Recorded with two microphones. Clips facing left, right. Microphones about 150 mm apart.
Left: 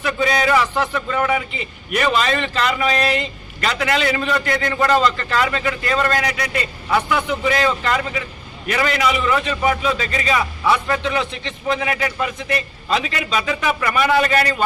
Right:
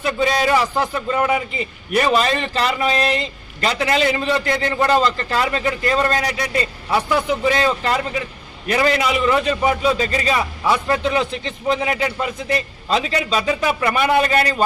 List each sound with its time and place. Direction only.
0.0 s a man's voice: 30° right (ahead or behind)